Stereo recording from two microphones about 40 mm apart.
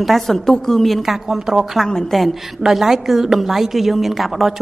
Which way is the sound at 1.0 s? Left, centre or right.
Centre.